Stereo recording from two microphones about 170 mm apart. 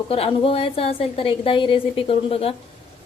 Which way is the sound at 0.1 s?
35° left (ahead or behind).